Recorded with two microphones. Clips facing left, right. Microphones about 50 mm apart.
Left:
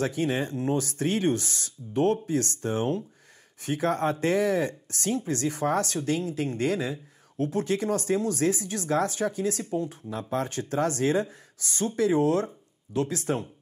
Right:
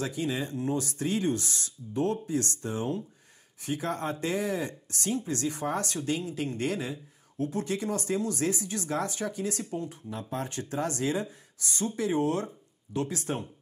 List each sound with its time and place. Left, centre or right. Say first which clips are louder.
0.0 s speech: left 4 dB; left